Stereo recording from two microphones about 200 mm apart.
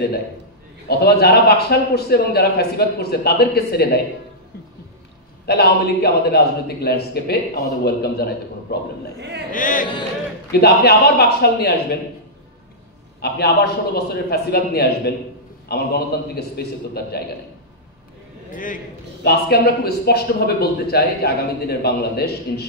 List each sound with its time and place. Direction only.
0.8 s a man's voice: 50° left (ahead or behind)
5.5 s a man's voice: 50° left (ahead or behind)
9.2 s speech: 60° right (ahead or behind)
9.5 s a man's voice: 40° left (ahead or behind)
13.2 s a man's voice: 50° left (ahead or behind)
18.5 s a man's voice: 40° left (ahead or behind)